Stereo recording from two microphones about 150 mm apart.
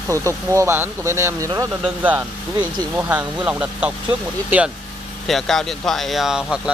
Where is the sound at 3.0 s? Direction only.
10° right (ahead or behind).